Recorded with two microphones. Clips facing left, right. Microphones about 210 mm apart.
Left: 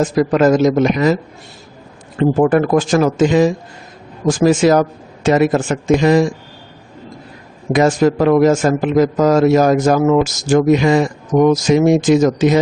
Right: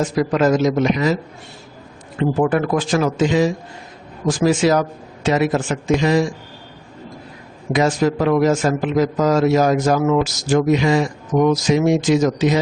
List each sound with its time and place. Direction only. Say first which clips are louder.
0.0 s a man's voice: left 4 dB; 50° left (ahead or behind)
2.1 s a man's voice: left 5 dB; 40° left (ahead or behind)
7.7 s a man's voice: left 4 dB; 50° left (ahead or behind)